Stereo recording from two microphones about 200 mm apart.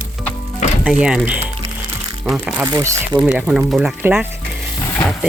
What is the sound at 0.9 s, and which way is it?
Speech, 5° right (ahead or behind).